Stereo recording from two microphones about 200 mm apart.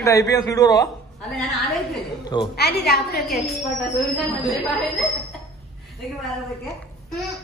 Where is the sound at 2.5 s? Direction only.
50° left (ahead or behind).